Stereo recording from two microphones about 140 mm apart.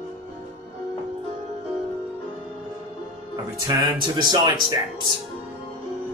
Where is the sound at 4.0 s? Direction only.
30° right (ahead or behind).